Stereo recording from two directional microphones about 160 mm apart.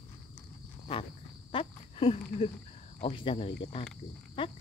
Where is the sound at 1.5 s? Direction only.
35° left (ahead or behind).